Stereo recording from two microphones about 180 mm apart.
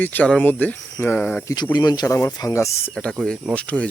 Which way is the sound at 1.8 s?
20° left (ahead or behind).